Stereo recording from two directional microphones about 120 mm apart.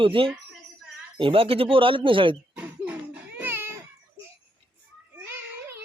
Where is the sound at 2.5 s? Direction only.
10° right (ahead or behind).